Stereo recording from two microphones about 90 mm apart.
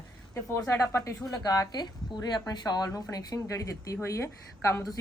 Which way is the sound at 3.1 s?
40° left (ahead or behind).